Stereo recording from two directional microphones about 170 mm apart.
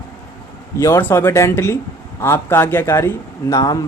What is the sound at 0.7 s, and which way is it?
Speech, 15° left (ahead or behind).